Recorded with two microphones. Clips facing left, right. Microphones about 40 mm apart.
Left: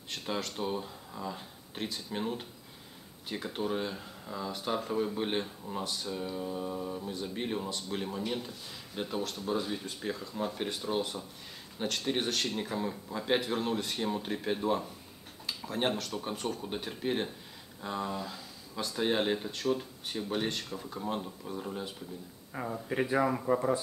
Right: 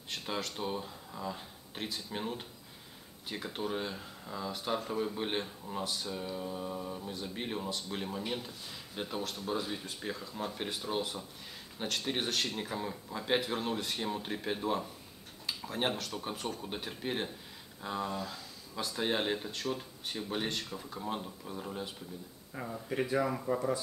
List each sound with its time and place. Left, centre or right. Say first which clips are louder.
0.1 s speech: left 2 dB; centre
22.8 s speech: left 3 dB; centre